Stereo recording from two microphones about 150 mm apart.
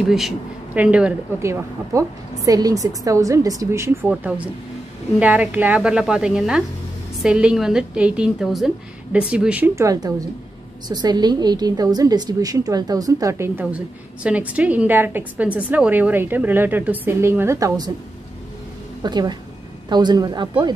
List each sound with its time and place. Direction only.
0.0 s a woman's voice: centre (ahead or behind)
1.4 s a woman's voice: 20° right (ahead or behind)
4.1 s a woman's voice: 10° right (ahead or behind)
9.8 s a woman's voice: 25° right (ahead or behind)
19.0 s a woman's voice: 30° right (ahead or behind)